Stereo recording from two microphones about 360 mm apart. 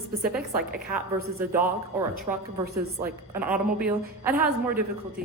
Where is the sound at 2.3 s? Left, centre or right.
Centre.